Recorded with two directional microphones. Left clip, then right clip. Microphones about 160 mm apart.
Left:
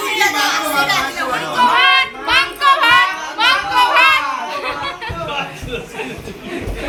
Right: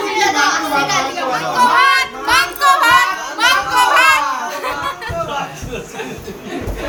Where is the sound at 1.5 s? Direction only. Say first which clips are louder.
Even; 10° left (ahead or behind).